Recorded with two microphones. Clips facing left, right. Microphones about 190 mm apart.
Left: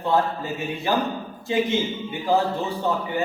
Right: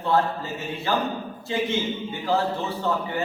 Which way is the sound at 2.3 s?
15° left (ahead or behind).